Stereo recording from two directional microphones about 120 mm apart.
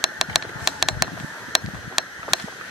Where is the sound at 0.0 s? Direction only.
Centre (ahead or behind).